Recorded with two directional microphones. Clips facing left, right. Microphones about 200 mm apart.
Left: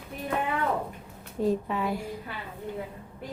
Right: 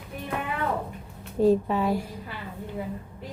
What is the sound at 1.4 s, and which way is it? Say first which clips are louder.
Speech: right 6 dB; 35° right (ahead or behind).